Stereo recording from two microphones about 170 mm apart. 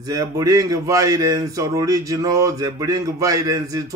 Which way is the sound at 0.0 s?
20° right (ahead or behind).